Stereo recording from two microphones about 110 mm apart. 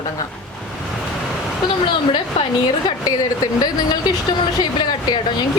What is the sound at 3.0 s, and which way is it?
A woman's voice, 35° left (ahead or behind).